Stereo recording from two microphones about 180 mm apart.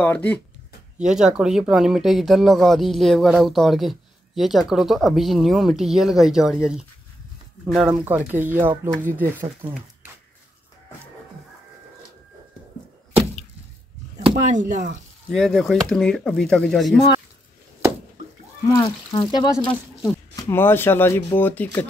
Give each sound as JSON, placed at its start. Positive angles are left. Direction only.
{"t": 0.0, "sound": "speech", "side_deg": 10}
{"t": 0.9, "sound": "speech", "side_deg": -5}
{"t": 7.9, "sound": "speech", "side_deg": -15}
{"t": 14.5, "sound": "speech", "side_deg": -45}
{"t": 15.3, "sound": "speech", "side_deg": 0}
{"t": 18.7, "sound": "speech", "side_deg": 25}
{"t": 19.6, "sound": "speech", "side_deg": 5}